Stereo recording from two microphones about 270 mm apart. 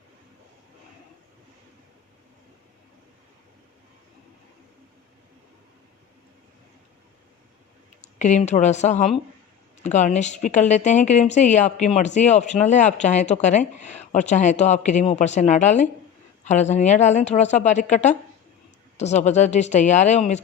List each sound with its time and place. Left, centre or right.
8.2 s speech: left